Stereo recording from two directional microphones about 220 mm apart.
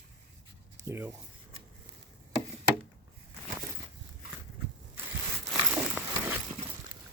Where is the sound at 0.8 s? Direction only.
10° right (ahead or behind).